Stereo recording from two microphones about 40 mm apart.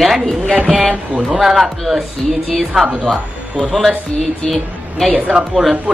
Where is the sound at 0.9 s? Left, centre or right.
Centre.